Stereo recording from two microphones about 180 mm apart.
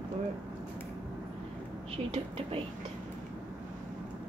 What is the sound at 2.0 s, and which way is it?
Speech, 30° right (ahead or behind).